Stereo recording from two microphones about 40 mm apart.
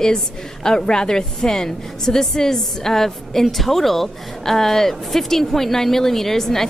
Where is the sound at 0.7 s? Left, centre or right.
Centre.